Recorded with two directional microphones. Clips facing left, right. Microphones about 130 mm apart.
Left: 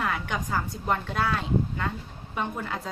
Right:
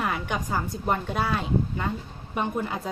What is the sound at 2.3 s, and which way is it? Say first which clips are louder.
Speech: right 3 dB; 15° right (ahead or behind).